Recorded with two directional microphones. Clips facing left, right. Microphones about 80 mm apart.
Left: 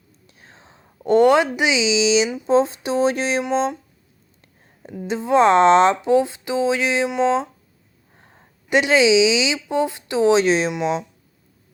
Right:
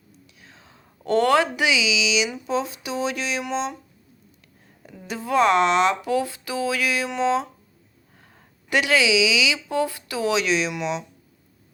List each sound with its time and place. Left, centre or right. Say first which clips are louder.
0.3 s speech: left 4 dB; left
2.5 s a sound: left 8 dB; left
4.8 s a woman's voice: left 7 dB; left